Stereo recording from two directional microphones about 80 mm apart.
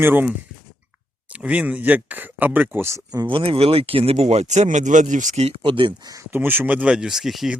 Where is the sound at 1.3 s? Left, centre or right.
Centre.